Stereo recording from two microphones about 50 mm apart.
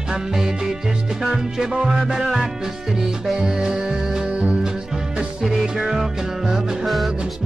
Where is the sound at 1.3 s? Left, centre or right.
Centre.